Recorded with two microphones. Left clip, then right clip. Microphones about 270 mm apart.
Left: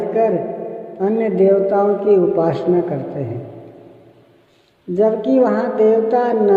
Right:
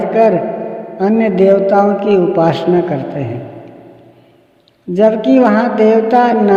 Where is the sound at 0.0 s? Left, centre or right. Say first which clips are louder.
Right 6 dB; right.